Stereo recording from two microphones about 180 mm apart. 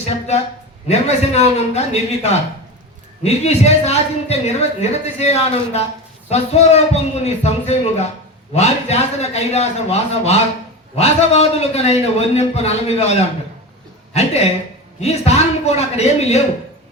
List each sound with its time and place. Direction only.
0.0 s speech: 35° left (ahead or behind)